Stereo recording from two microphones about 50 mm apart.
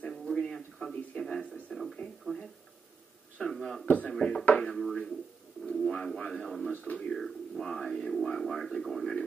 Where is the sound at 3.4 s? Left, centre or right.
Centre.